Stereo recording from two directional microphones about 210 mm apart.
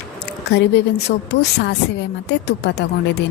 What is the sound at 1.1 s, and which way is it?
Speech, 40° left (ahead or behind).